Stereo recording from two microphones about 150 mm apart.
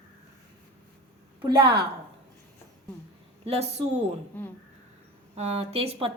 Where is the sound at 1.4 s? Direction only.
30° right (ahead or behind).